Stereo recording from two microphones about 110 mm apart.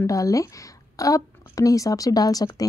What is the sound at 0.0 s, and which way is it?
Speech, 30° left (ahead or behind).